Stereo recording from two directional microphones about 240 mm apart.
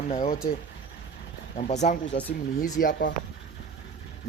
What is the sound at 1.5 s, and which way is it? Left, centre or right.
Speech, left.